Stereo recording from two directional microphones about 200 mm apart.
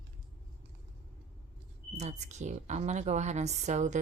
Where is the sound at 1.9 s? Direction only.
35° right (ahead or behind).